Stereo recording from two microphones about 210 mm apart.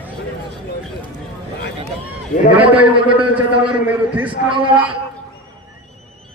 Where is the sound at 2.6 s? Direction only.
5° right (ahead or behind).